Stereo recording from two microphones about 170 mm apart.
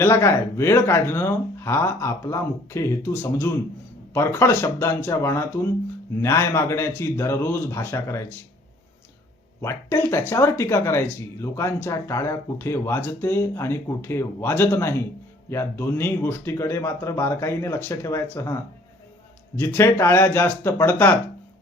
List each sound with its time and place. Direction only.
0.0 s speech: 15° left (ahead or behind)
9.6 s speech: 15° left (ahead or behind)
19.5 s speech: 15° left (ahead or behind)